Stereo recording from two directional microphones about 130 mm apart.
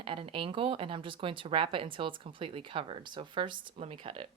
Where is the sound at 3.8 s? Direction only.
50° right (ahead or behind).